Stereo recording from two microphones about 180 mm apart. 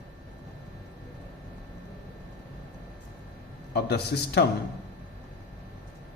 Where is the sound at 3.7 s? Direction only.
65° left (ahead or behind).